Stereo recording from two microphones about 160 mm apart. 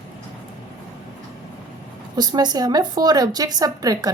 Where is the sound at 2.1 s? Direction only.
25° right (ahead or behind).